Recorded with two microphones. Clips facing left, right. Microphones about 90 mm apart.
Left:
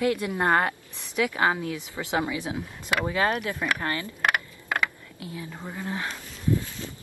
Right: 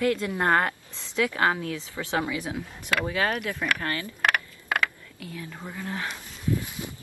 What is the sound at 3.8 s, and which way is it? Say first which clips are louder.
Speech: even; 20° left (ahead or behind).